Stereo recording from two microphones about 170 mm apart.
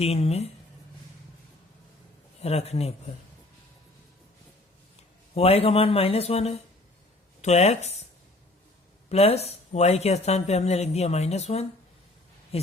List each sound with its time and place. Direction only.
0.0 s speech: 40° left (ahead or behind)
2.4 s speech: 40° left (ahead or behind)
5.3 s speech: 35° left (ahead or behind)
9.0 s speech: 40° left (ahead or behind)
12.5 s a sound: 35° left (ahead or behind)